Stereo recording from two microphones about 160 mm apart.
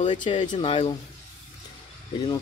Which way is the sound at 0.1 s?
30° left (ahead or behind).